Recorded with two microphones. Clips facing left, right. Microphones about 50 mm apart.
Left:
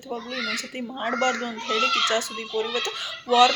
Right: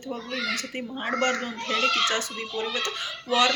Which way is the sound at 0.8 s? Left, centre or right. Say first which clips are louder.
Left 4 dB; right.